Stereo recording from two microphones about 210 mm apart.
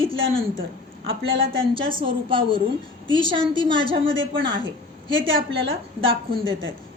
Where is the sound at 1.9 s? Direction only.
25° right (ahead or behind).